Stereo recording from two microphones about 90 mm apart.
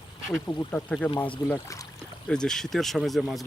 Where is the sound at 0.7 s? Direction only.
15° left (ahead or behind).